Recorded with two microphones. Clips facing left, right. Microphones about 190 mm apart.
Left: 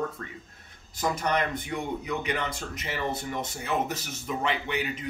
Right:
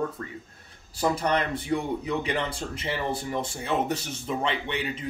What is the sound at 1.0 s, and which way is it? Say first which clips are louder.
Speech: right 2 dB; 30° right (ahead or behind).